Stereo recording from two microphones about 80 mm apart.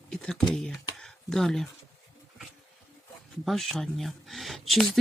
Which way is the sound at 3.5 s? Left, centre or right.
Centre.